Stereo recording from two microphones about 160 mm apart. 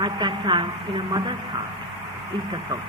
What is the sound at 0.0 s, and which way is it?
Speech, 30° right (ahead or behind).